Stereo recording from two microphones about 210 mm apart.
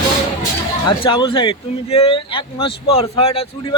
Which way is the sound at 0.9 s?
25° left (ahead or behind).